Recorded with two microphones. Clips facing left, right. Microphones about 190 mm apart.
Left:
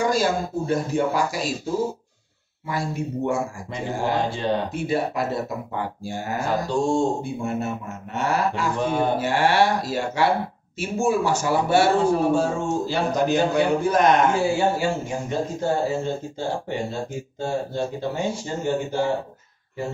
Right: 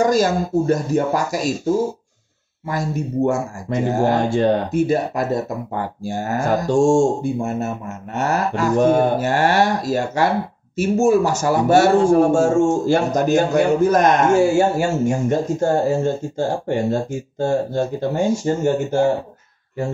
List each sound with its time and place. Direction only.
0.0 s speech: 45° right (ahead or behind)
2.6 s speech: 45° right (ahead or behind)